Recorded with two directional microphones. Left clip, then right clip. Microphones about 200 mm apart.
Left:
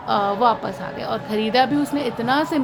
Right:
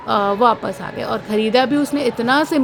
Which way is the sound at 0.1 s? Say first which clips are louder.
Right 3 dB; 30° right (ahead or behind).